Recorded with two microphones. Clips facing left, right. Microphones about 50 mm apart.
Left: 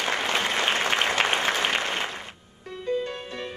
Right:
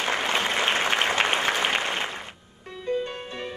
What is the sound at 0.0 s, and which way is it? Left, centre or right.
Applause, centre.